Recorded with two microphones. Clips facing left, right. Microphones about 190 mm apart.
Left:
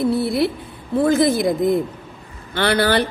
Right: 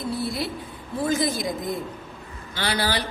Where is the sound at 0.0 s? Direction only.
60° left (ahead or behind).